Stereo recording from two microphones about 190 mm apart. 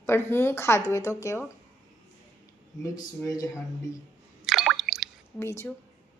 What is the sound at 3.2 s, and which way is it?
Speech, 20° left (ahead or behind).